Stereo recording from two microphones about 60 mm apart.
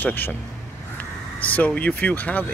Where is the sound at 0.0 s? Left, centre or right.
Left.